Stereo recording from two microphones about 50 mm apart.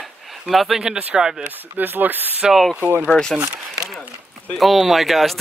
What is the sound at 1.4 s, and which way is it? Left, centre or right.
Speech, right.